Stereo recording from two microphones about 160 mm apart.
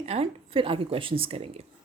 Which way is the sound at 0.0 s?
40° right (ahead or behind).